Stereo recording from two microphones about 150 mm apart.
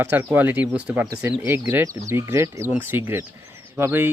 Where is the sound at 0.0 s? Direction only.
15° right (ahead or behind).